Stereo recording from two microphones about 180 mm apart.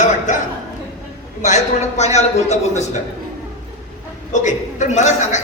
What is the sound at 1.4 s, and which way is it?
A man's voice, 40° left (ahead or behind).